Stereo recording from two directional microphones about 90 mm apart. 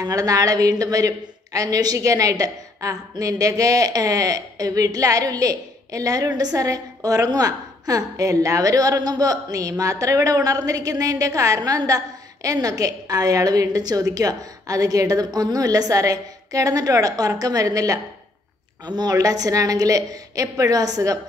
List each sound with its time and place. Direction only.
0.0 s a woman's voice: 40° right (ahead or behind)